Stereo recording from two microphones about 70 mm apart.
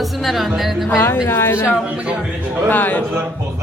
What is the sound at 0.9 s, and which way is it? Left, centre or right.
Speech, left.